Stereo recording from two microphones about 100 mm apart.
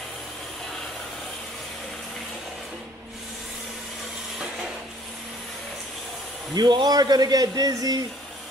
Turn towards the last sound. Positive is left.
turn(degrees=-40)  # may be behind; listen again after turning